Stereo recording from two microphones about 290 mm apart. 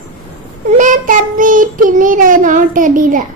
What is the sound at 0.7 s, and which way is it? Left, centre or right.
Child singing, right.